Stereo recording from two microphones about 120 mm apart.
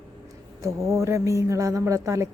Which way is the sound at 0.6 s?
25° right (ahead or behind).